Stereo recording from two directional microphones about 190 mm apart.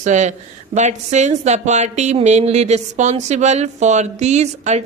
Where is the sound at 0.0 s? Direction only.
40° right (ahead or behind).